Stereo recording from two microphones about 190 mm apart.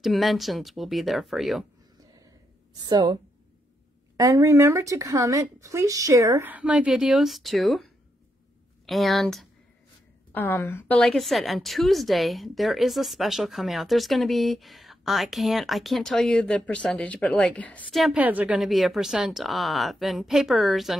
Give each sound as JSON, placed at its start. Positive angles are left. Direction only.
{"t": 0.0, "sound": "a woman's voice", "side_deg": 0}
{"t": 2.7, "sound": "a woman's voice", "side_deg": -20}
{"t": 4.2, "sound": "a woman's voice", "side_deg": -15}
{"t": 10.3, "sound": "a woman's voice", "side_deg": 10}